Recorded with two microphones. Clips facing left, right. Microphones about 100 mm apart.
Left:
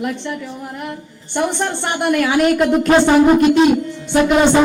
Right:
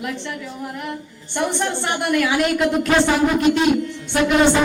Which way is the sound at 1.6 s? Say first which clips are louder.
Left 3 dB; 40° left (ahead or behind).